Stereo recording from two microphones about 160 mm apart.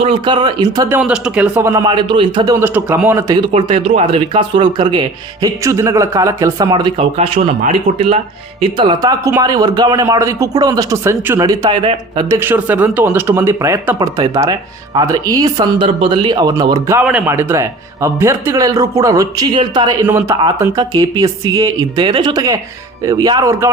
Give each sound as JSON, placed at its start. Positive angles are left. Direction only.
{"t": 0.0, "sound": "speech", "side_deg": -30}
{"t": 0.9, "sound": "speech", "side_deg": -5}
{"t": 1.7, "sound": "speech", "side_deg": -30}
{"t": 3.4, "sound": "speech", "side_deg": -35}
{"t": 12.4, "sound": "speech", "side_deg": -10}
{"t": 20.1, "sound": "speech", "side_deg": -15}